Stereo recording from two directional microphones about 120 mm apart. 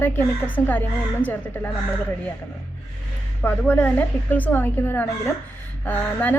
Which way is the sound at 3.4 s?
15° left (ahead or behind).